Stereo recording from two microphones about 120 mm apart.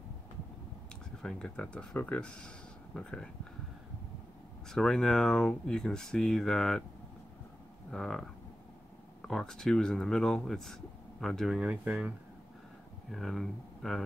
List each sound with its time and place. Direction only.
1.2 s speech: 10° left (ahead or behind)
4.6 s speech: 5° left (ahead or behind)
7.9 s speech: 5° left (ahead or behind)
9.3 s speech: 5° left (ahead or behind); by 12.1 s 10° right (ahead or behind)
13.1 s speech: centre (ahead or behind)